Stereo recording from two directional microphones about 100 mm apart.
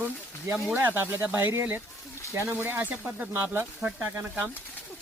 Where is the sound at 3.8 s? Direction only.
10° right (ahead or behind).